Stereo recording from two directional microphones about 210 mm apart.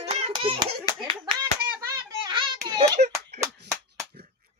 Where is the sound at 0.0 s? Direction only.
30° right (ahead or behind).